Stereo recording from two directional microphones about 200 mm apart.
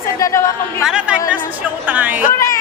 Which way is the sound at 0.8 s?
5° right (ahead or behind).